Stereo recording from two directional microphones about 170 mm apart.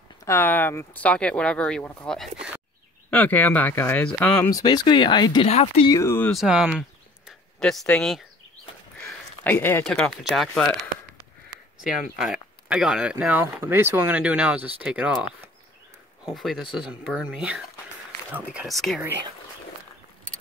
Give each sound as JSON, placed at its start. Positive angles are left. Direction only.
{"t": 0.2, "sound": "speech", "side_deg": 15}
{"t": 3.1, "sound": "speech", "side_deg": 10}
{"t": 4.5, "sound": "speech", "side_deg": 20}
{"t": 5.5, "sound": "speech", "side_deg": 40}
{"t": 5.9, "sound": "speech", "side_deg": 15}
{"t": 6.3, "sound": "speech", "side_deg": -5}
{"t": 7.2, "sound": "a sound", "side_deg": 0}
{"t": 9.8, "sound": "speech", "side_deg": 5}
{"t": 12.2, "sound": "speech", "side_deg": -5}